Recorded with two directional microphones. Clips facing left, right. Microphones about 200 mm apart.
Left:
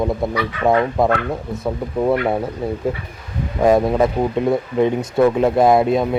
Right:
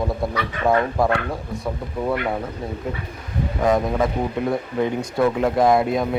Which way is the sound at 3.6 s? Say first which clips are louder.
Left 5 dB; 30° left (ahead or behind).